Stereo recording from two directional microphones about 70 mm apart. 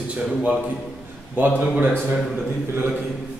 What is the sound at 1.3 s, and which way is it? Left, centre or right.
Speech, right.